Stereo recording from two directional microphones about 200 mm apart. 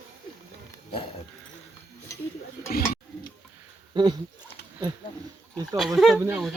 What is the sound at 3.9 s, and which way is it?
Speech, 20° right (ahead or behind).